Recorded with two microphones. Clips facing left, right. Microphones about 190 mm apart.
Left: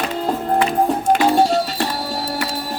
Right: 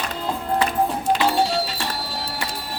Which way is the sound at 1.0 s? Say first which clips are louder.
Left 6 dB; 50° left (ahead or behind).